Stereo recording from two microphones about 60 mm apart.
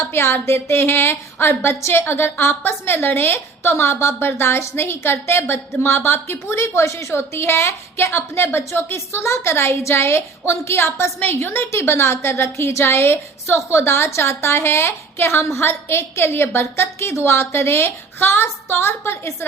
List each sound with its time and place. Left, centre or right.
0.1 s a woman's voice: left